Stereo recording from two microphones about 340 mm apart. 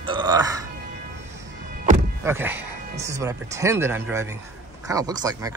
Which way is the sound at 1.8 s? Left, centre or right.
Right.